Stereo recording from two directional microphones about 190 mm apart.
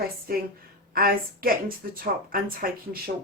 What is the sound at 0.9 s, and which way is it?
Speech, 50° right (ahead or behind).